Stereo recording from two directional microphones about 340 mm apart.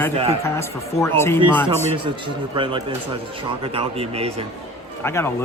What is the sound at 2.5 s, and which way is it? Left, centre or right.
Speech, centre.